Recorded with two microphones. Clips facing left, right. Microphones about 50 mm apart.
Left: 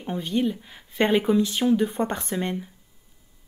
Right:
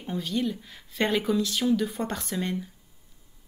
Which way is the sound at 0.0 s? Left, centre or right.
Left.